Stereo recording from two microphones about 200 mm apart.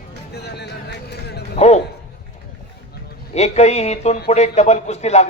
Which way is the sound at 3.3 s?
35° left (ahead or behind).